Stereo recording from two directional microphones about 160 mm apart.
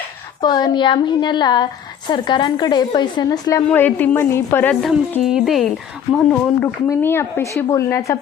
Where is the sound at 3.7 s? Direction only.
10° left (ahead or behind).